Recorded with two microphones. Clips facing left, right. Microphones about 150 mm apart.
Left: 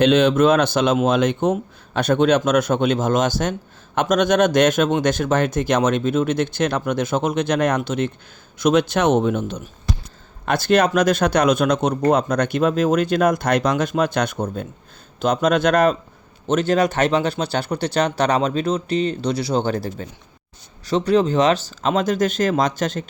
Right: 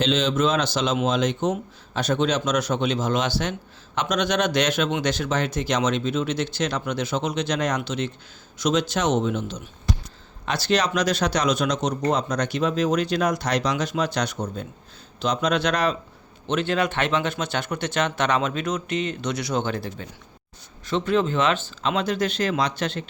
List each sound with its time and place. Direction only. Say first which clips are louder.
0.0 s a man's voice: left 7 dB; 60° left (ahead or behind); by 23.0 s 45° left (ahead or behind)